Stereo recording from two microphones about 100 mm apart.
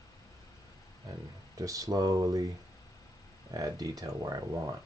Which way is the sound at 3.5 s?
40° right (ahead or behind).